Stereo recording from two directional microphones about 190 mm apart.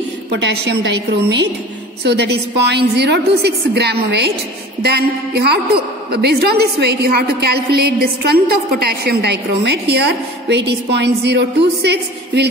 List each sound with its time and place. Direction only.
0.3 s a woman's voice: 65° right (ahead or behind)